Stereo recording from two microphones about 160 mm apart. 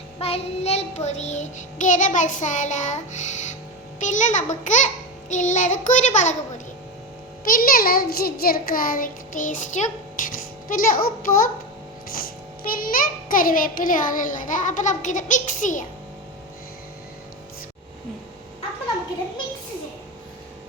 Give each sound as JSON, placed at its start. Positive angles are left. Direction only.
{"t": 0.2, "sound": "child singing", "side_deg": 40}
{"t": 7.4, "sound": "a child's voice", "side_deg": 60}
{"t": 12.6, "sound": "child singing", "side_deg": 60}